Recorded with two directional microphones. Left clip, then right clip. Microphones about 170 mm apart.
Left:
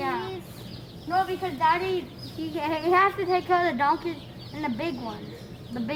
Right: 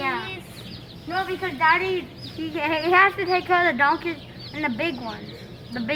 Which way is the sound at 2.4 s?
15° left (ahead or behind).